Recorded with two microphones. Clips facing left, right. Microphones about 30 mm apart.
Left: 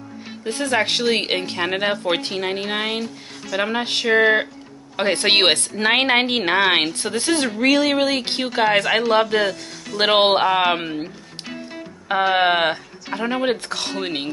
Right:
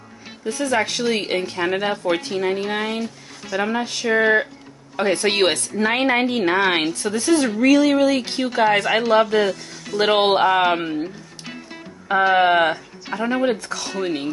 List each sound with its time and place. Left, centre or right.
0.5 s speech: left
3.8 s a woman's voice: left
4.2 s speech: left
5.1 s a woman's voice: left
6.6 s speech: centre
6.9 s speech: left
8.7 s speech: left
11.4 s music: centre
12.4 s speech: left